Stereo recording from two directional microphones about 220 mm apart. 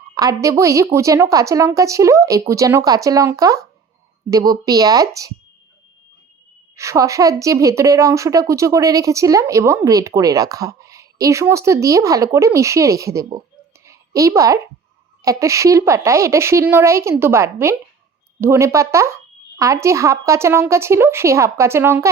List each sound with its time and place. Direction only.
0.1 s a woman's voice: 15° right (ahead or behind)
6.7 s a woman's voice: 15° right (ahead or behind)